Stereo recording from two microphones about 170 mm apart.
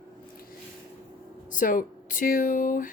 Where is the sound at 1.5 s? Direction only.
50° left (ahead or behind).